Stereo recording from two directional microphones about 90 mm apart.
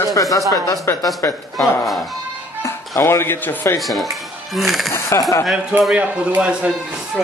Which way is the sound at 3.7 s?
Centre (ahead or behind).